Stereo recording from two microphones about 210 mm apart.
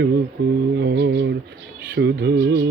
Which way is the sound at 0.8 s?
55° right (ahead or behind).